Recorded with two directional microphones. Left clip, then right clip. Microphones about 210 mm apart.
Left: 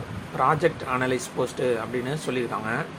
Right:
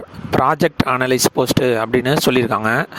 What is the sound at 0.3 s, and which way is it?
Speech, 55° right (ahead or behind).